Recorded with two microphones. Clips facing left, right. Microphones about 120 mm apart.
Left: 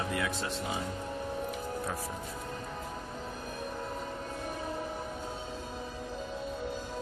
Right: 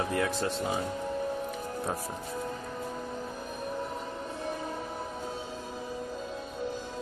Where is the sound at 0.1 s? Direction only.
40° right (ahead or behind).